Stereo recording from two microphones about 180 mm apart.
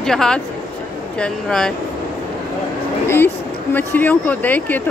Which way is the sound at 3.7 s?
10° left (ahead or behind).